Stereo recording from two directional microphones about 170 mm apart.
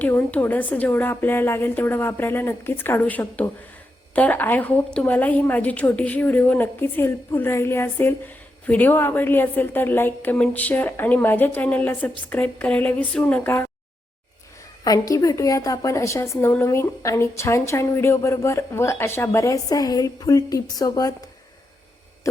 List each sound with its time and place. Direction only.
0.0 s a woman's voice: 10° left (ahead or behind)
14.8 s a woman's voice: 20° left (ahead or behind)